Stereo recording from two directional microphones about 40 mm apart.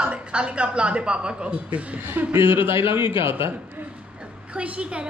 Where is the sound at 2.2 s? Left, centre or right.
Right.